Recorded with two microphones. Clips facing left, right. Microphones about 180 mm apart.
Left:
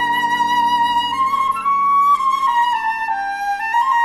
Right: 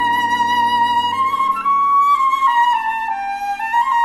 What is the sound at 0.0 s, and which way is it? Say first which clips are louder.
Music: right 1 dB; 70° left (ahead or behind).